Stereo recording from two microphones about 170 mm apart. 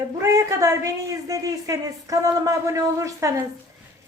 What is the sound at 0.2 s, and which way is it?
A woman's voice, 15° right (ahead or behind).